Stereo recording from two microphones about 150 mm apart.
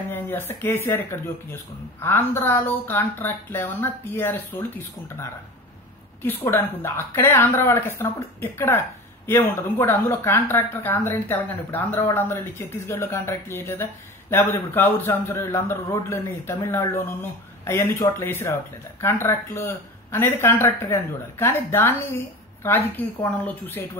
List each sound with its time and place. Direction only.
0.1 s speech: 15° left (ahead or behind)
22.9 s speech: 10° left (ahead or behind)